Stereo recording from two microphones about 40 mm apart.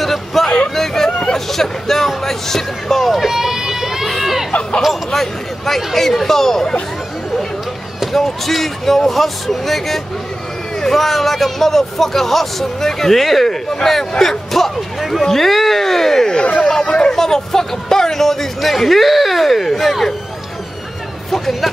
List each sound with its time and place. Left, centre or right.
0.0 s a sound: centre
0.7 s hubbub: centre
1.5 s speech: centre
4.5 s a sound: left
4.8 s a man's voice: centre
8.0 s a man's voice: centre
16.3 s speech: left
16.8 s a sound: left
17.2 s speech: centre
21.3 s a man's voice: centre